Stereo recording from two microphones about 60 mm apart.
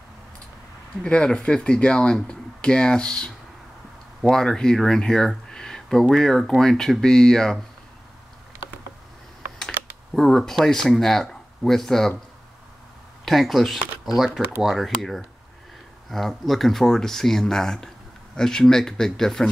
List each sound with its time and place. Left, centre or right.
1.0 s speech: centre
10.1 s speech: centre
13.2 s speech: centre